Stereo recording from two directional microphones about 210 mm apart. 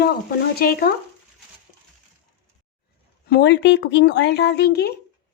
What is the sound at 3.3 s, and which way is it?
Speech, 55° left (ahead or behind).